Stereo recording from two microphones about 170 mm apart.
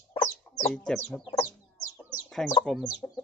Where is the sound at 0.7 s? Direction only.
Centre (ahead or behind).